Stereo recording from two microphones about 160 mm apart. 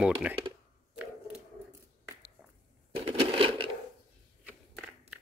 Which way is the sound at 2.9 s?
35° right (ahead or behind).